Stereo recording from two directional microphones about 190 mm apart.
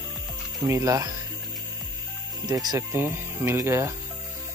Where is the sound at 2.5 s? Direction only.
20° right (ahead or behind).